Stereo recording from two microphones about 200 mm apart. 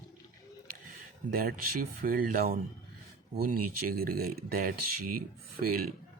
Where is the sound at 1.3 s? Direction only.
45° right (ahead or behind).